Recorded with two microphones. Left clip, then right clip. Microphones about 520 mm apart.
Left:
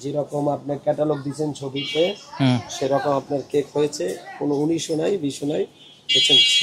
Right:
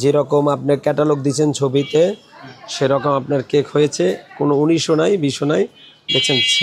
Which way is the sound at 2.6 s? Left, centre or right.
Right.